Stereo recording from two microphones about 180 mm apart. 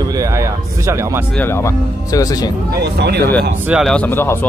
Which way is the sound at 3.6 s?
5° right (ahead or behind).